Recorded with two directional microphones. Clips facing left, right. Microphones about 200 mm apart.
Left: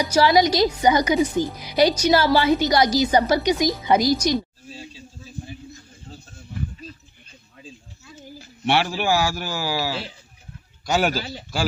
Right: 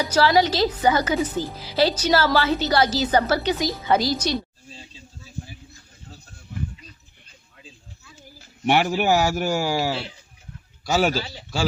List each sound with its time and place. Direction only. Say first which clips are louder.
0.0 s a woman's voice: left 1 dB; 15° left (ahead or behind)
6.1 s a sound: left 4 dB; 30° left (ahead or behind)
8.6 s a man's voice: right 2 dB; 15° right (ahead or behind)
10.8 s a man's voice: even; 5° right (ahead or behind)